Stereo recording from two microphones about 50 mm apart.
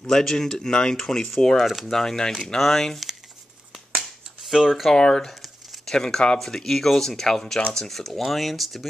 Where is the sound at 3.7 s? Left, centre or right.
Centre.